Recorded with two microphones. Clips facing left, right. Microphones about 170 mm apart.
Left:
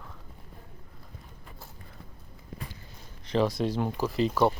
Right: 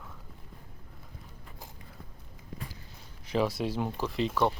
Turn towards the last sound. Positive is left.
turn(degrees=0)  # may be behind; listen again after turning